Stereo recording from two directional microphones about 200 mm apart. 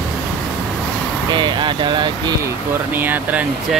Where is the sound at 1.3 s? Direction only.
25° right (ahead or behind).